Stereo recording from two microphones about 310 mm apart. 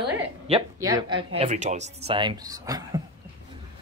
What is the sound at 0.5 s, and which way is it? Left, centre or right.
Speech, centre.